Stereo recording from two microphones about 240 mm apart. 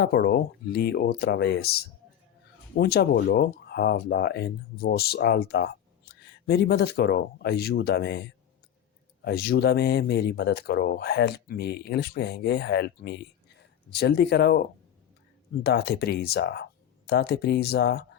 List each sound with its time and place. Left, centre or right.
0.0 s speech: left
9.2 s speech: left
15.6 s speech: left